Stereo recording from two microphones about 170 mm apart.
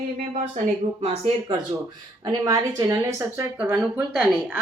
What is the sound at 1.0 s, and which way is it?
Speech, 35° right (ahead or behind).